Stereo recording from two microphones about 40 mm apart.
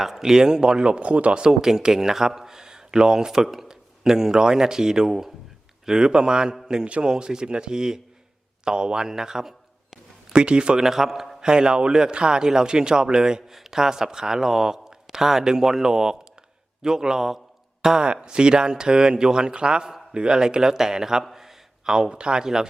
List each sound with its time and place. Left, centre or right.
0.0 s a man's voice: centre; by 1.4 s right
1.4 s a man's voice: centre; by 7.1 s right
7.1 s a man's voice: centre
10.3 s a man's voice: right
10.8 s a man's voice: centre
21.2 s a sound: centre